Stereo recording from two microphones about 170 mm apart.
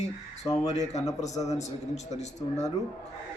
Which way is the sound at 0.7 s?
40° left (ahead or behind).